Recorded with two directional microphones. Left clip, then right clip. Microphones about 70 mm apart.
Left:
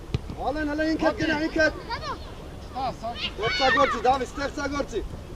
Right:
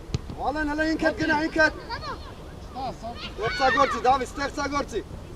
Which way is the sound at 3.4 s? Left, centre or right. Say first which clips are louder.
Even; left.